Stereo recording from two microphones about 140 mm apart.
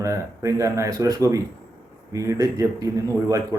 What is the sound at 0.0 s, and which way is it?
Speech, 20° right (ahead or behind).